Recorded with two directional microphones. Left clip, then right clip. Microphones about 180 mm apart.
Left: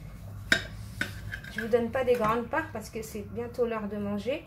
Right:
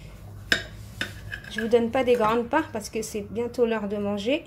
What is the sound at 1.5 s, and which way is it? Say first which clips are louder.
A woman's voice: right 5 dB; 45° right (ahead or behind).